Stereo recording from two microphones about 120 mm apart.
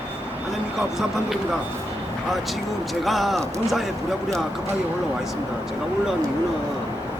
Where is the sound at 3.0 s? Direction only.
Centre (ahead or behind).